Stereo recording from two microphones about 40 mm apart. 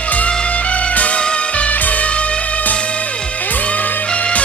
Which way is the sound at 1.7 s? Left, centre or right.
Left.